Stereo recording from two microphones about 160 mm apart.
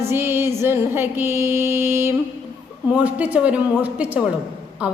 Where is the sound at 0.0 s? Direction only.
15° right (ahead or behind).